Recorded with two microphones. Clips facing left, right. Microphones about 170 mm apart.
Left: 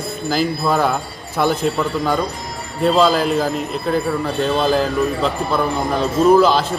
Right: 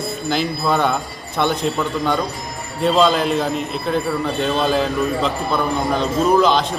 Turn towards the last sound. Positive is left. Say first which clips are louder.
# left 3 dB
turn(degrees=5)  # may be behind; listen again after turning